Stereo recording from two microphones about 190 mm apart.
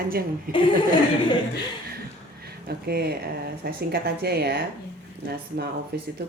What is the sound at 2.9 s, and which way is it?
Speech, 55° right (ahead or behind).